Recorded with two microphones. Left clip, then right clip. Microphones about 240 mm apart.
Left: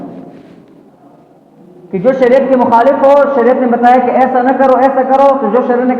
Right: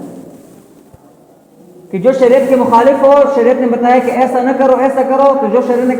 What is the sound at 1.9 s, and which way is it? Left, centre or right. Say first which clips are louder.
Speech: even; right.